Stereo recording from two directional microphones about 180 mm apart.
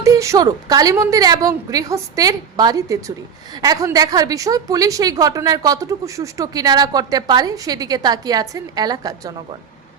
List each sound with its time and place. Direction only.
0.0 s a woman's voice: 15° right (ahead or behind)